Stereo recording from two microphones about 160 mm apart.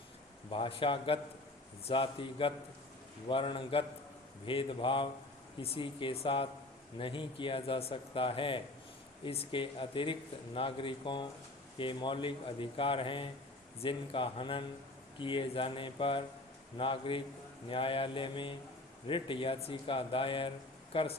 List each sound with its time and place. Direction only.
0.5 s speech: 35° left (ahead or behind)